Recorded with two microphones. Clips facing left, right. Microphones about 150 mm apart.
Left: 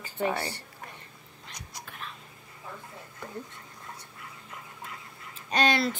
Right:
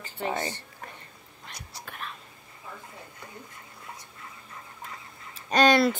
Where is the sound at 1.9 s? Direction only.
60° right (ahead or behind).